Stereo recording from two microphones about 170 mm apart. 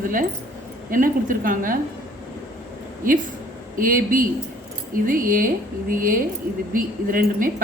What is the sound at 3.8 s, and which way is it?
A woman's voice, 55° right (ahead or behind).